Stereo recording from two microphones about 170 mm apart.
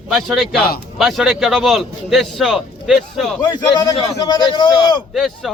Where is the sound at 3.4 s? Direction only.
20° left (ahead or behind).